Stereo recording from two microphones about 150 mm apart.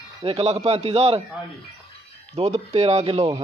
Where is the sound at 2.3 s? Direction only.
45° right (ahead or behind).